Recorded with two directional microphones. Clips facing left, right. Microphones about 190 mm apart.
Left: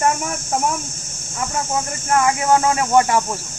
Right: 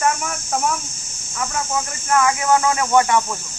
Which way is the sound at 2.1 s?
25° left (ahead or behind).